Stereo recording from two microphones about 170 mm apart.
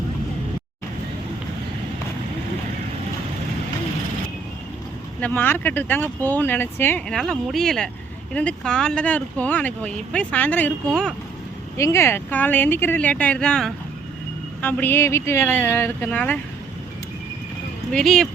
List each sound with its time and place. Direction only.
5.2 s speech: 10° left (ahead or behind)
11.8 s speech: 15° left (ahead or behind)
17.9 s speech: 5° left (ahead or behind)